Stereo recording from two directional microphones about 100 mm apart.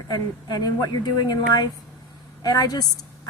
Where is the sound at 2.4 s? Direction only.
40° left (ahead or behind).